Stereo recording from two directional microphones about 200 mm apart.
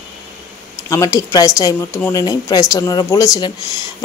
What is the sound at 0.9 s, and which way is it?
A woman's voice, 15° left (ahead or behind).